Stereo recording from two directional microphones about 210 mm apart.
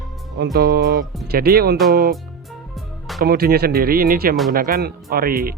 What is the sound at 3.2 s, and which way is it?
Speech, 45° right (ahead or behind).